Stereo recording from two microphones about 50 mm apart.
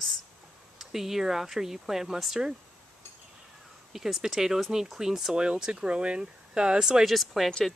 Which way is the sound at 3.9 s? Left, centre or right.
Centre.